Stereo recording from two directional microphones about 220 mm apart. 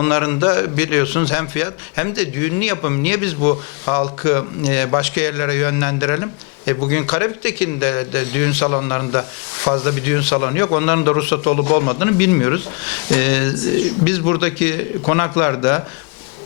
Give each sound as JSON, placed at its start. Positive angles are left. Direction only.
{"t": 0.0, "sound": "a man's voice", "side_deg": 15}